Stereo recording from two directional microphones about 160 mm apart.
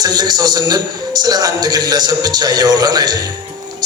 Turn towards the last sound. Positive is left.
turn(degrees=-25)  # may be behind; listen again after turning